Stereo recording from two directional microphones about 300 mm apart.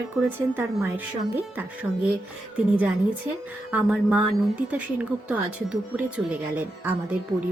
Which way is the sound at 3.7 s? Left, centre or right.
Centre.